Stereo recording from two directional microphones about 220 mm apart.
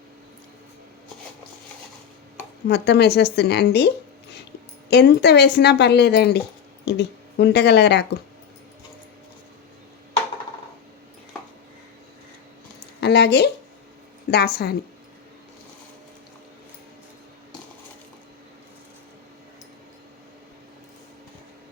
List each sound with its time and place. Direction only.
2.6 s speech: 50° left (ahead or behind)
13.0 s speech: 50° left (ahead or behind)